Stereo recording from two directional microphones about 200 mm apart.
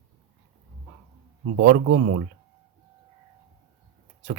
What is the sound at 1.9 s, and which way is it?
Speech, 50° right (ahead or behind).